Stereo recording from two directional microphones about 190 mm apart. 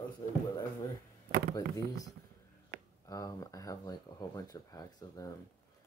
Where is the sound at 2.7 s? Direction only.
60° right (ahead or behind).